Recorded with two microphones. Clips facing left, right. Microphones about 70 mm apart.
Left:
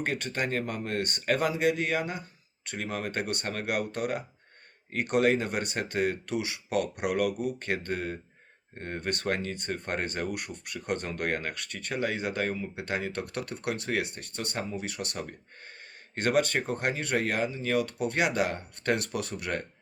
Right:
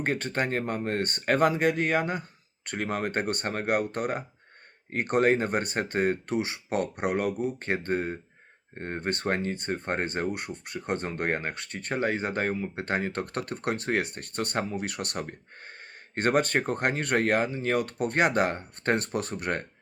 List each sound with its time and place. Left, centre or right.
0.0 s speech: right